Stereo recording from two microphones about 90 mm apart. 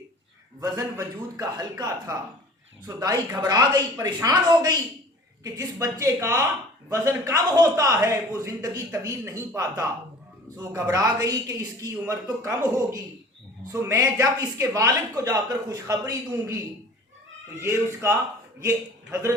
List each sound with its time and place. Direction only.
0.6 s a man's voice: 45° right (ahead or behind)
10.6 s speech: 35° right (ahead or behind)
17.6 s speech: 30° right (ahead or behind)